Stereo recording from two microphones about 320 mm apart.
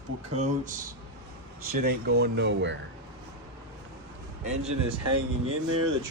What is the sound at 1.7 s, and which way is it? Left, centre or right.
Speech, right.